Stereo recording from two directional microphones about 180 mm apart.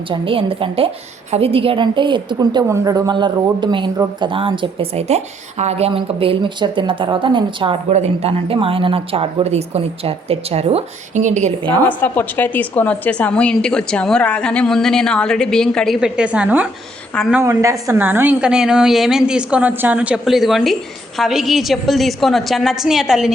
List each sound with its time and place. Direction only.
0.1 s a woman's voice: 30° right (ahead or behind)
11.6 s a woman's voice: 20° right (ahead or behind)
11.9 s a woman's voice: 10° left (ahead or behind)
17.4 s a woman's voice: 15° right (ahead or behind)